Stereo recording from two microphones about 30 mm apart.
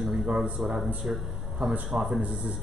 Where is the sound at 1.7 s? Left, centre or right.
Right.